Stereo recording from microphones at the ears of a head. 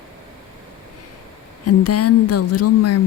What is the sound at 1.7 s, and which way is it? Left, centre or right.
Speech, left.